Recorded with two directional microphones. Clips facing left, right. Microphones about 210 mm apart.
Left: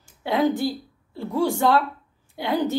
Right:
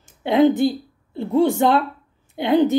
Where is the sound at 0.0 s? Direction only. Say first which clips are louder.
Right 6 dB; 20° right (ahead or behind).